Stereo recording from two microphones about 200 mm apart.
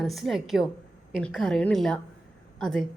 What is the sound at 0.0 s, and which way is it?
A woman's voice, centre (ahead or behind).